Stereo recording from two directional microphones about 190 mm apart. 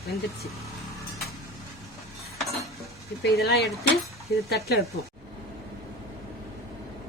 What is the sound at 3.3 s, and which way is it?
Speech, 55° left (ahead or behind).